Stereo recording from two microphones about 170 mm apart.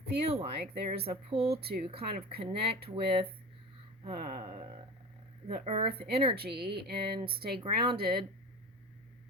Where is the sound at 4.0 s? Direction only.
35° right (ahead or behind).